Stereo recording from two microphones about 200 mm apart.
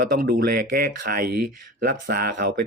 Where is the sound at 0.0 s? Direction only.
50° right (ahead or behind).